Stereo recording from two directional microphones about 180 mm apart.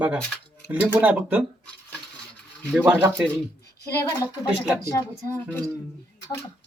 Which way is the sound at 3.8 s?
20° left (ahead or behind).